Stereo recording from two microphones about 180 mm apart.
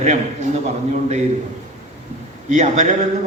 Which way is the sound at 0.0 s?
40° right (ahead or behind).